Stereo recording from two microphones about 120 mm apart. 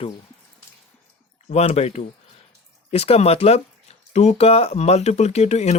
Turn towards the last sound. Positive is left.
turn(degrees=65)  # may be behind; listen again after turning